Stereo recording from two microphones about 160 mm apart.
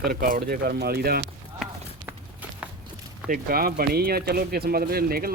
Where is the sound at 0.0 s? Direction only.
65° right (ahead or behind).